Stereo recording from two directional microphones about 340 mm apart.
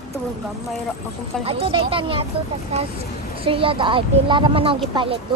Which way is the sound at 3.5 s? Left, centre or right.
Centre.